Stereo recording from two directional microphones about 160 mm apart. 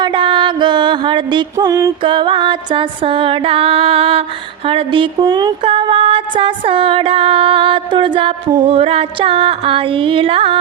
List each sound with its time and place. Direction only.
0.0 s music: 30° right (ahead or behind)
4.7 s speech: 30° right (ahead or behind)
5.6 s music: 35° right (ahead or behind)